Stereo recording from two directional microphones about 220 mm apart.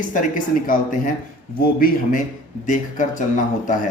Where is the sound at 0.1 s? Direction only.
35° left (ahead or behind).